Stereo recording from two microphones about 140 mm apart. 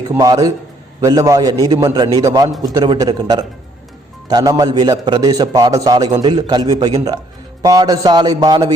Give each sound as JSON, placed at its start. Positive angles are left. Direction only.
{"t": 0.2, "sound": "a man's voice", "side_deg": -25}